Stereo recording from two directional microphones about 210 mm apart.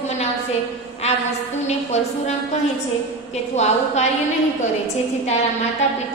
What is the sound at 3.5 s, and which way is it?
Speech, 30° left (ahead or behind).